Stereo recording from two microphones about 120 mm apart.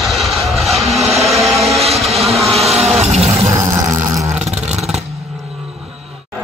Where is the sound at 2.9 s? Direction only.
65° right (ahead or behind).